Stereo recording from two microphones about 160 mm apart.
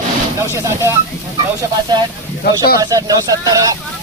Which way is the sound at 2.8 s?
20° right (ahead or behind).